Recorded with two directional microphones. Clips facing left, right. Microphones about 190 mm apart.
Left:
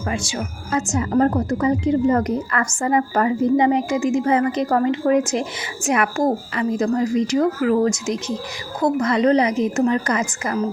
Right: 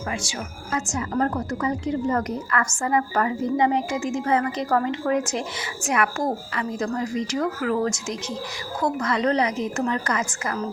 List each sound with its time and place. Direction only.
0.1 s a woman's voice: 30° left (ahead or behind)